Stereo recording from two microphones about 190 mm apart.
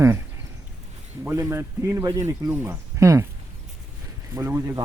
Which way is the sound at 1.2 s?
15° right (ahead or behind).